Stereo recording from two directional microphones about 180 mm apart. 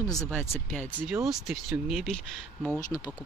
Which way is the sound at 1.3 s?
Centre (ahead or behind).